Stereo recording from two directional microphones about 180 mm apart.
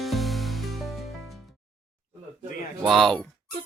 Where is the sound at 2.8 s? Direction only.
Centre (ahead or behind).